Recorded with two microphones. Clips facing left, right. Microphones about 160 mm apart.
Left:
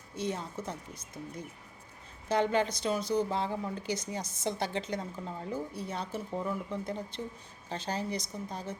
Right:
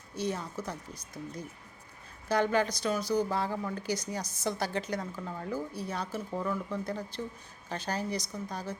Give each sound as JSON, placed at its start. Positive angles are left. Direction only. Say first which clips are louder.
{"t": 0.1, "sound": "a woman's voice", "louder": "right 1 dB", "side_deg": 25}